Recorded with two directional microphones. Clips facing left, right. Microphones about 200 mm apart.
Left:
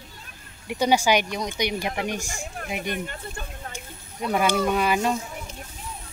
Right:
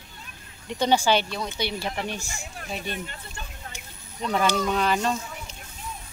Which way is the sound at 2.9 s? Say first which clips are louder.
Left 4 dB; 50° left (ahead or behind).